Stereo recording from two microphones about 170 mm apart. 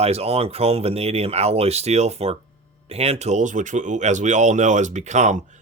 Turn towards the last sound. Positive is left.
turn(degrees=-45)  # may be behind; listen again after turning